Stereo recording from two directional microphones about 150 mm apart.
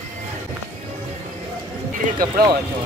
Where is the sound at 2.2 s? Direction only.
25° right (ahead or behind).